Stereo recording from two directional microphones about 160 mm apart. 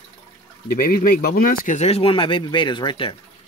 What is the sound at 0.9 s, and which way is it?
Speech, 70° left (ahead or behind).